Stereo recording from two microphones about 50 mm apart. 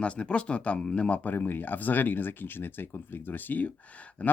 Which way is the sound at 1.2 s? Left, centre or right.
Left.